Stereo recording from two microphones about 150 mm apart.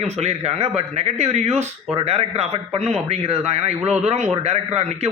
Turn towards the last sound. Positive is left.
turn(degrees=-45)  # may be behind; listen again after turning